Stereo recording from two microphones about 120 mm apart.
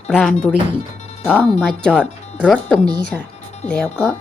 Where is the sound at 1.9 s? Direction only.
10° left (ahead or behind).